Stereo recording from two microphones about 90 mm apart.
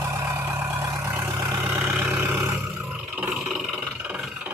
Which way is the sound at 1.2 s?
45° right (ahead or behind).